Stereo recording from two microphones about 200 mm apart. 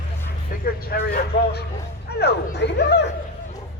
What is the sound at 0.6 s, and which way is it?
A man's voice, 50° left (ahead or behind).